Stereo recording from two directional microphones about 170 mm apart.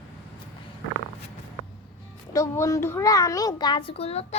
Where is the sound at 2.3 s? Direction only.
20° left (ahead or behind); by 4.3 s 40° left (ahead or behind).